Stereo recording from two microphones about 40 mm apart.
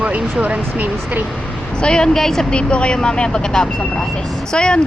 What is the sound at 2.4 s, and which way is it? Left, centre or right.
Speech, left.